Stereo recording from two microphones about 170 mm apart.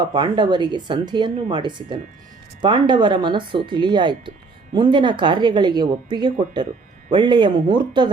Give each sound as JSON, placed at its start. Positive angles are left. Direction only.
{"t": 0.1, "sound": "speech", "side_deg": -25}